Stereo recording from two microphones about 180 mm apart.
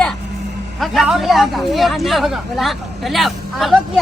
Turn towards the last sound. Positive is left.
turn(degrees=0)  # may be behind; listen again after turning